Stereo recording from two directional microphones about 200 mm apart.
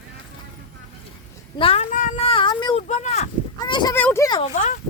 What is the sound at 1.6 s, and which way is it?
Speech, 30° left (ahead or behind).